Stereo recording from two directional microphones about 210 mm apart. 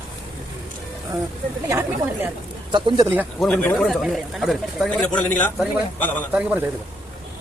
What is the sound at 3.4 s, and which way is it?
A man's voice, 5° left (ahead or behind).